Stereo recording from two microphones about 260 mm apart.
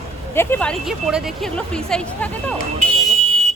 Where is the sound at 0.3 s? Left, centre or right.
Centre.